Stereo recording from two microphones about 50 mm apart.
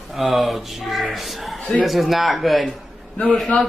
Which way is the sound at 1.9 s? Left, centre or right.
Centre.